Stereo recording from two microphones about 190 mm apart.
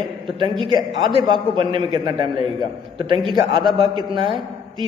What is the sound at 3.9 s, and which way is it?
Speech, 25° right (ahead or behind).